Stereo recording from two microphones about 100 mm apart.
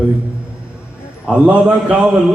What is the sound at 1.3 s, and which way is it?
Speech, 10° right (ahead or behind).